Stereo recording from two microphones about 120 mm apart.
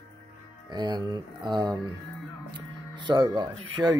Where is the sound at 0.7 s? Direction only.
35° right (ahead or behind).